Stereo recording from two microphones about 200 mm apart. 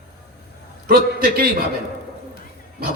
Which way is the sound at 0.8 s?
45° right (ahead or behind).